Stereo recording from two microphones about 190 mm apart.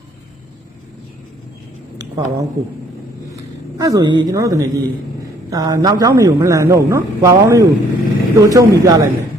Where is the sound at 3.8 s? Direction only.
20° right (ahead or behind).